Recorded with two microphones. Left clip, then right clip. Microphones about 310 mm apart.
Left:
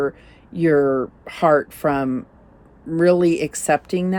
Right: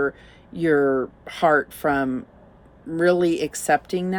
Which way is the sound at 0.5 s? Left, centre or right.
Centre.